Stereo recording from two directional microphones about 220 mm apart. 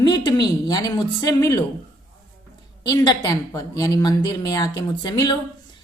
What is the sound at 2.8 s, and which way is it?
A woman's voice, 20° left (ahead or behind).